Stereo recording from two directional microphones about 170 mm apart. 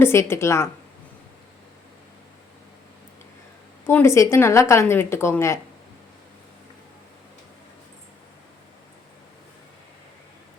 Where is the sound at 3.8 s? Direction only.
15° left (ahead or behind).